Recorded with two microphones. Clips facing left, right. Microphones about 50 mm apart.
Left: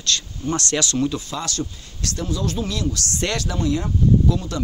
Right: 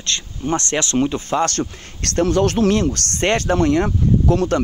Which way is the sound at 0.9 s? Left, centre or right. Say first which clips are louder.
Right 5 dB; right.